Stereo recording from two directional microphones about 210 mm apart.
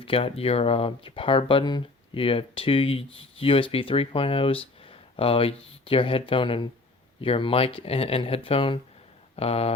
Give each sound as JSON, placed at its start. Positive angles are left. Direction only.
{"t": 0.0, "sound": "speech", "side_deg": 25}